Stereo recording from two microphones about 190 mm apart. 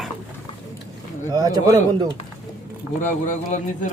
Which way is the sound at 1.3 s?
20° right (ahead or behind).